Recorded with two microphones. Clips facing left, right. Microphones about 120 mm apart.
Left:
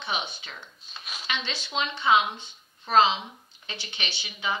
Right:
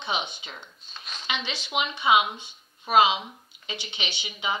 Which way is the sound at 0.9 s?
5° left (ahead or behind).